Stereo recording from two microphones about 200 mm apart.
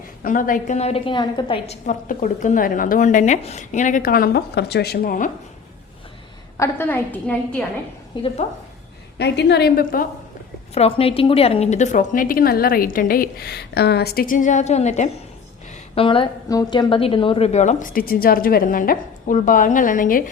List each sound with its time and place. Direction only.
0.2 s a woman's voice: 45° left (ahead or behind)
6.6 s a woman's voice: 10° left (ahead or behind)
8.1 s a woman's voice: 25° left (ahead or behind)
9.1 s a woman's voice: 60° left (ahead or behind)
10.8 s a woman's voice: 30° left (ahead or behind)